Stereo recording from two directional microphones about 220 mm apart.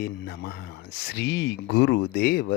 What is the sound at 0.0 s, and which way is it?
Speech, 45° left (ahead or behind).